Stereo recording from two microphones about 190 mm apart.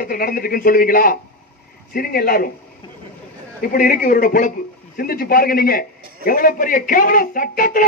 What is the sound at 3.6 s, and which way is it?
A man's voice, 45° left (ahead or behind).